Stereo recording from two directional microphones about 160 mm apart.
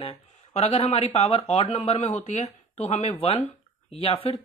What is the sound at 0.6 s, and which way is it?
Speech, 40° left (ahead or behind).